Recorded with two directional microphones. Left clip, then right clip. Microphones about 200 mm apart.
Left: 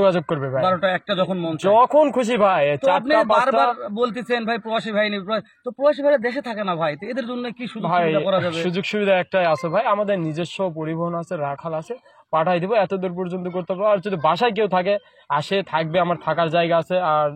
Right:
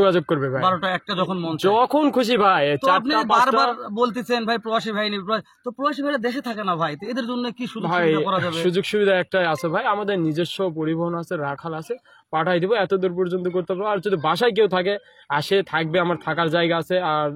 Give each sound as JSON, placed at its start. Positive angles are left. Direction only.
{"t": 0.3, "sound": "speech", "side_deg": -45}
{"t": 1.8, "sound": "a man's voice", "side_deg": -35}
{"t": 11.3, "sound": "a man's voice", "side_deg": -35}